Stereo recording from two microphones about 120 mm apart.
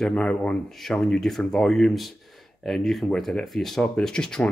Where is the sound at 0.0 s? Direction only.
10° left (ahead or behind).